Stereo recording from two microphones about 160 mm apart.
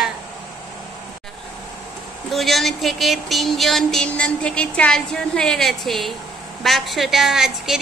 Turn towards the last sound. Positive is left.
turn(degrees=-5)  # may be behind; listen again after turning